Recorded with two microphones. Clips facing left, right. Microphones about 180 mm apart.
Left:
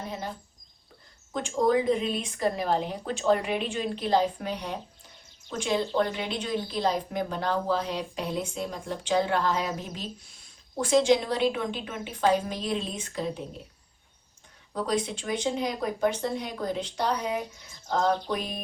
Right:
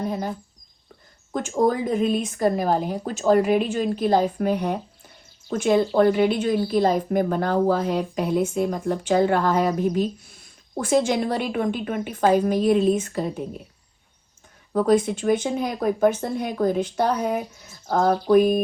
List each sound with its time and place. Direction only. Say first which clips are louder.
1.5 s a woman's voice: right 2 dB; 50° right (ahead or behind)
14.7 s a woman's voice: right 10 dB; 55° right (ahead or behind)